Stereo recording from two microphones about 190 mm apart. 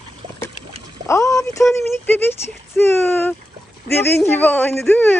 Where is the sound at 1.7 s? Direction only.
10° left (ahead or behind).